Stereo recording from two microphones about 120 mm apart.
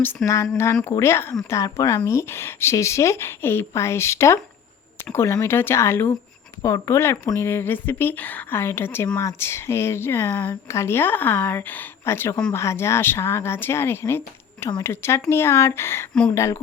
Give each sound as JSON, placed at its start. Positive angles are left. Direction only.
{"t": 0.2, "sound": "speech", "side_deg": 5}
{"t": 0.5, "sound": "speech", "side_deg": 20}